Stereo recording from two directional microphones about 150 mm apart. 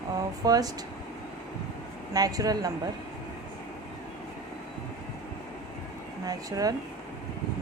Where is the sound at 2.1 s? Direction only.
25° right (ahead or behind).